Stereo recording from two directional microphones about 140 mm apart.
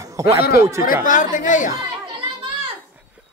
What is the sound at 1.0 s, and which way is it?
Speech, 65° left (ahead or behind).